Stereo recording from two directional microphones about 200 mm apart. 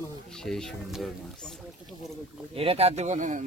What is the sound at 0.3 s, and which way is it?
Speech, centre (ahead or behind).